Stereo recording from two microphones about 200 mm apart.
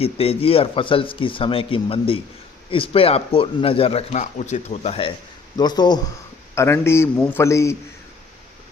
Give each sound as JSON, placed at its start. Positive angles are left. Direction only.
{"t": 0.0, "sound": "a man's voice", "side_deg": 30}